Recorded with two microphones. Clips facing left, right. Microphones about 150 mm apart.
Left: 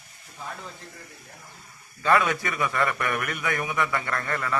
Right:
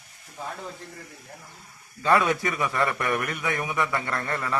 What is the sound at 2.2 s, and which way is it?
A man's voice, 30° right (ahead or behind).